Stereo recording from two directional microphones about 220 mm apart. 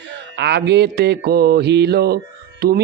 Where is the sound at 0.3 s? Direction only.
50° right (ahead or behind).